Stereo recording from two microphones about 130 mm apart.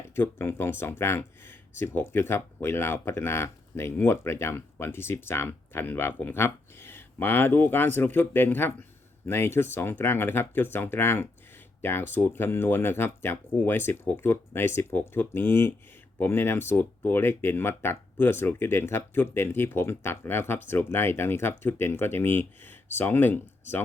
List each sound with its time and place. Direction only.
0.2 s speech: 20° left (ahead or behind)